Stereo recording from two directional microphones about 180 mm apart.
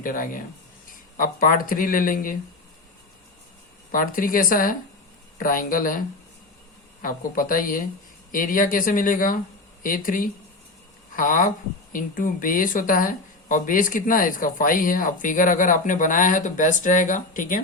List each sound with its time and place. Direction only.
0.0 s speech: 50° left (ahead or behind)
3.9 s speech: 50° left (ahead or behind)